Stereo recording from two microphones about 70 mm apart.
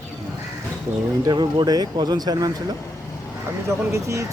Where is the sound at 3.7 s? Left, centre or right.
Right.